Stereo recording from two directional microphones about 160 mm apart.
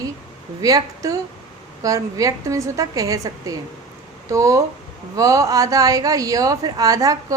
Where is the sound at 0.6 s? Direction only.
20° right (ahead or behind).